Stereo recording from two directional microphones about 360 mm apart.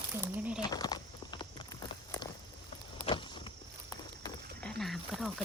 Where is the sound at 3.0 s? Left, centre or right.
Centre.